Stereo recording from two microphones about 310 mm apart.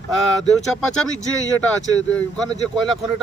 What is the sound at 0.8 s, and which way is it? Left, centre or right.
Speech, centre.